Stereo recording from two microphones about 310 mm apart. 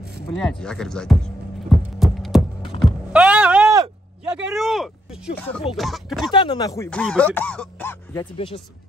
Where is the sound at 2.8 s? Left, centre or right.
Centre.